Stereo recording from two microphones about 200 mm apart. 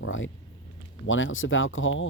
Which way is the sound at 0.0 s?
80° left.